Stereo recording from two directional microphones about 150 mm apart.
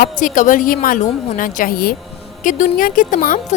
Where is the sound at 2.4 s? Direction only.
60° left (ahead or behind).